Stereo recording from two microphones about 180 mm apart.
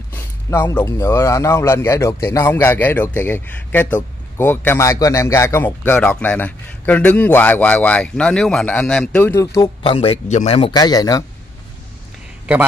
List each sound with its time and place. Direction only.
0.1 s speech: 15° left (ahead or behind)
9.8 s speech: 30° left (ahead or behind)
10.7 s speech: 20° left (ahead or behind)